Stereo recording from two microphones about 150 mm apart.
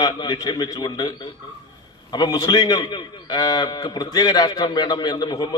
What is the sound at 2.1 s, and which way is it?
A man's voice, 25° left (ahead or behind).